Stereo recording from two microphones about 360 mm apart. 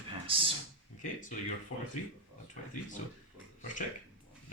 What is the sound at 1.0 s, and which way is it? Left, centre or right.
Speech, left.